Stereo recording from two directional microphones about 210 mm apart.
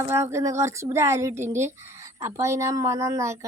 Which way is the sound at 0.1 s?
10° right (ahead or behind).